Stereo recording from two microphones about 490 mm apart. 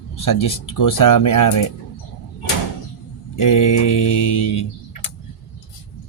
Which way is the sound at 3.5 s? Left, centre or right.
Left.